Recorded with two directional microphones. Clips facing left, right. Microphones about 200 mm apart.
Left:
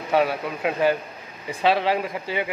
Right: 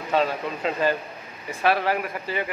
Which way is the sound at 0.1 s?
10° left (ahead or behind).